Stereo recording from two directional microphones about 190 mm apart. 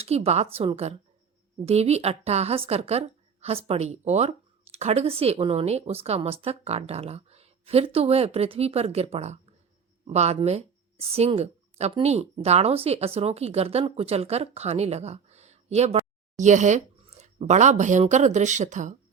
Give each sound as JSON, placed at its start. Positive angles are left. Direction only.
{"t": 0.0, "sound": "speech", "side_deg": -35}